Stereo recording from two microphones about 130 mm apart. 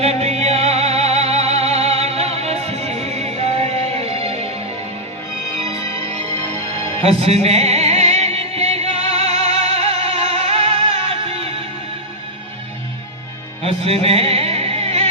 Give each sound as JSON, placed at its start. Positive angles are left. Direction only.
{"t": 0.0, "sound": "music", "side_deg": -55}
{"t": 7.0, "sound": "music", "side_deg": -55}
{"t": 13.6, "sound": "music", "side_deg": -50}